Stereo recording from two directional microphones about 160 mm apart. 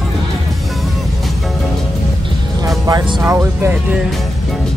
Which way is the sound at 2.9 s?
20° right (ahead or behind).